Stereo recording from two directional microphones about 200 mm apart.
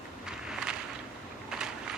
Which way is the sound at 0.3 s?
5° right (ahead or behind).